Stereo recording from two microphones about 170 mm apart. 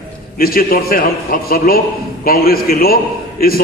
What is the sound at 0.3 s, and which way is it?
A man's voice, 60° left (ahead or behind).